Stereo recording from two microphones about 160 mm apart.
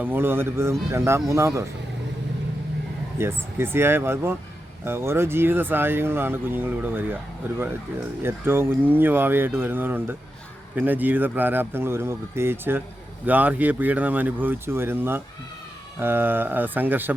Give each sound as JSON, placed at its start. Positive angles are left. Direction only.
{"t": 0.0, "sound": "speech", "side_deg": -15}
{"t": 3.2, "sound": "speech", "side_deg": -15}